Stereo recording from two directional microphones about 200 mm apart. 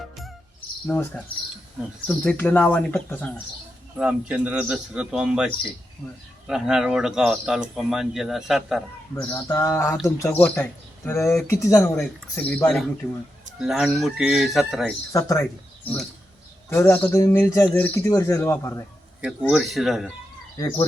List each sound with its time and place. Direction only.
0.9 s speech: 10° left (ahead or behind)
3.9 s a man's voice: 5° right (ahead or behind)
6.5 s a man's voice: 5° right (ahead or behind)
9.3 s a man's voice: 15° left (ahead or behind)
15.1 s speech: 15° left (ahead or behind)
19.2 s a man's voice: 5° right (ahead or behind)
20.6 s speech: 15° left (ahead or behind)